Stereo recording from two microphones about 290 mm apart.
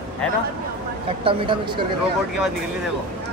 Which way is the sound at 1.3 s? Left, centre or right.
Centre.